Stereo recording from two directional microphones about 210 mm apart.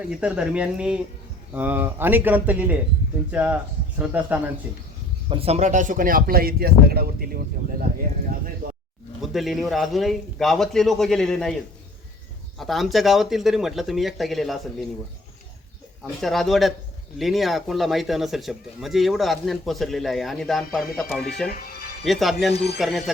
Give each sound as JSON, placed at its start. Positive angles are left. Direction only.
{"t": 0.1, "sound": "speech", "side_deg": -5}
{"t": 5.3, "sound": "speech", "side_deg": -30}
{"t": 8.6, "sound": "roaring cats", "side_deg": -45}
{"t": 9.2, "sound": "speech", "side_deg": 0}
{"t": 12.5, "sound": "speech", "side_deg": 0}
{"t": 16.2, "sound": "speech", "side_deg": 0}
{"t": 21.5, "sound": "speech", "side_deg": 45}
{"t": 22.0, "sound": "speech", "side_deg": 0}